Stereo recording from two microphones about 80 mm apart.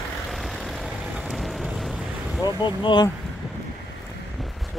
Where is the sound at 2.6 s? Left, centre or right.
Left.